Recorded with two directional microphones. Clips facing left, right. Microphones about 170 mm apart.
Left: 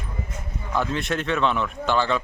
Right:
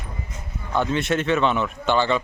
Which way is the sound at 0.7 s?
Centre (ahead or behind).